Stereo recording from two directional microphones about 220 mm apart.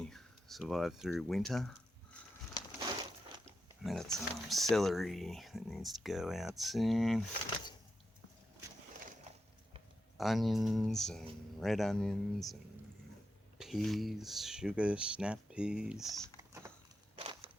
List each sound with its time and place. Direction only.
0.0 s speech: centre (ahead or behind)
3.8 s speech: centre (ahead or behind)
10.2 s speech: centre (ahead or behind)
13.6 s speech: centre (ahead or behind)
16.4 s a sound: 15° right (ahead or behind)
17.2 s a sound: 25° right (ahead or behind)